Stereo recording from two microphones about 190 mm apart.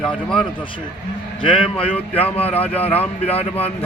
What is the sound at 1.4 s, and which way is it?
A man's voice, 25° left (ahead or behind).